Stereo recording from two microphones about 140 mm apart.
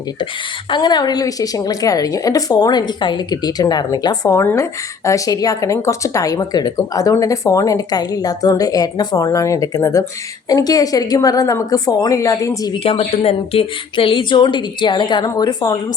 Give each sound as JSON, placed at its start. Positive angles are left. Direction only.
{"t": 0.7, "sound": "a woman's voice", "side_deg": 30}
{"t": 12.7, "sound": "speech", "side_deg": 45}